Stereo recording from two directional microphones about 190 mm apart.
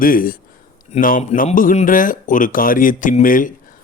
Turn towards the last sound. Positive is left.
turn(degrees=45)  # may be behind; listen again after turning